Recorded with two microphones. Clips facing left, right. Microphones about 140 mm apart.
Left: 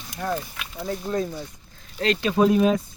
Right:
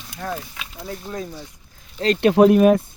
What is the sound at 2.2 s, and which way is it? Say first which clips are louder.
Speech: right 7 dB; 65° right (ahead or behind).